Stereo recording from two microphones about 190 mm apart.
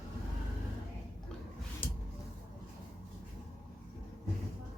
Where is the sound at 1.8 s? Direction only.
25° left (ahead or behind).